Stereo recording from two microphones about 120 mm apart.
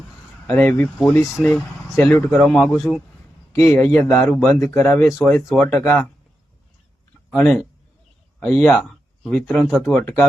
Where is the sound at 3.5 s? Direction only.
25° left (ahead or behind).